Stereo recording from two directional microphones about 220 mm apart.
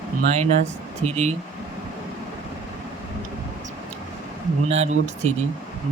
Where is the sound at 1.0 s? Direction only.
30° right (ahead or behind).